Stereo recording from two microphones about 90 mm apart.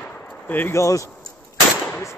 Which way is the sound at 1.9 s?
25° left (ahead or behind).